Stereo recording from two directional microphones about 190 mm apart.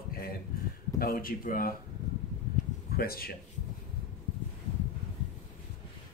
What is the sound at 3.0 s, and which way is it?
Speech, 50° left (ahead or behind).